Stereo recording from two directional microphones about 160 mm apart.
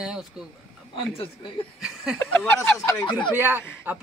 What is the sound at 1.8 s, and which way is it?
Speech, 5° right (ahead or behind).